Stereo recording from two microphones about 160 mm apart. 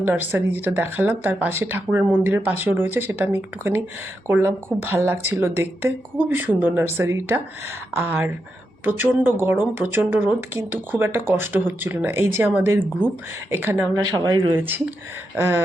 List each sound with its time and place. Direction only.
0.0 s speech: 10° right (ahead or behind)
13.9 s speech: 25° right (ahead or behind)
14.5 s speech: 10° right (ahead or behind)